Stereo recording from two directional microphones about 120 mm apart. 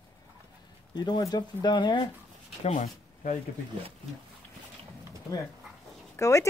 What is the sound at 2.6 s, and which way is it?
Speech, 85° left.